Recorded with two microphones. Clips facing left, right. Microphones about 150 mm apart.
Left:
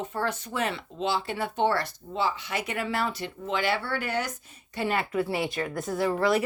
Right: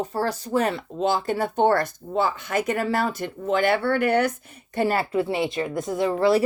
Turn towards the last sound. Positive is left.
turn(degrees=-30)  # may be behind; listen again after turning